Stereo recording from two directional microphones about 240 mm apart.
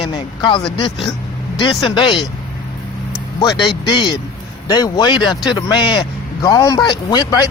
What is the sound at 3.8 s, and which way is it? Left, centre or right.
A man's voice, centre.